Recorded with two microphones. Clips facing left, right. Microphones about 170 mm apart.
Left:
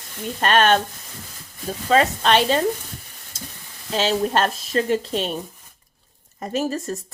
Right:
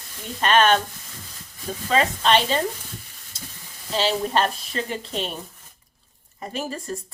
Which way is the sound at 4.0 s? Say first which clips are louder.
Left 2 dB; 45° left (ahead or behind).